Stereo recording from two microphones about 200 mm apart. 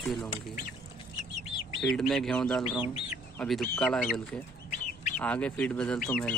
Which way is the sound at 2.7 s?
25° left (ahead or behind).